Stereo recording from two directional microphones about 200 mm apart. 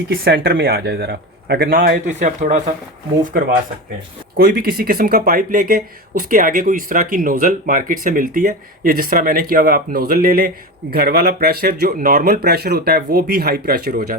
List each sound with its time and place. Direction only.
0.1 s speech: 50° right (ahead or behind)
4.4 s speech: 50° right (ahead or behind)